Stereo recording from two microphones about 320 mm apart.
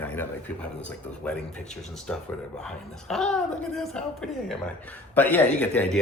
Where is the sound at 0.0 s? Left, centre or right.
Centre.